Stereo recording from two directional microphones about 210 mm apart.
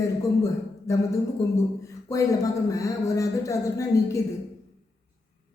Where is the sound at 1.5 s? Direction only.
15° left (ahead or behind).